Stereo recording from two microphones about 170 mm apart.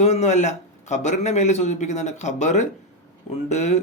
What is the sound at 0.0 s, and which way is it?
Speech, 40° left (ahead or behind).